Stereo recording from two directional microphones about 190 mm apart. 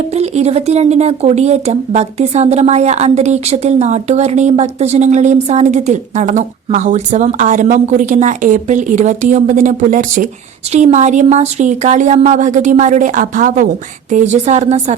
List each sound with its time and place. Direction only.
0.1 s speech: 35° right (ahead or behind)